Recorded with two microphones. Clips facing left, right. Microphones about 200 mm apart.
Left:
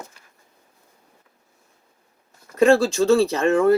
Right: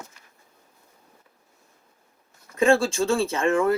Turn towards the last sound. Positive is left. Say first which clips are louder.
# left 4 dB
turn(degrees=35)  # may be behind; listen again after turning